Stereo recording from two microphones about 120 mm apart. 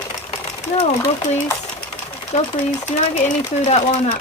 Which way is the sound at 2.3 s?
90° left.